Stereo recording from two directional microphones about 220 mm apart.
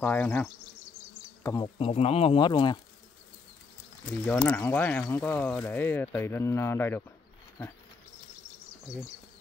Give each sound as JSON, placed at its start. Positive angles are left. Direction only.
{"t": 0.0, "sound": "speech", "side_deg": 10}
{"t": 1.4, "sound": "speech", "side_deg": 20}
{"t": 4.3, "sound": "speech", "side_deg": 10}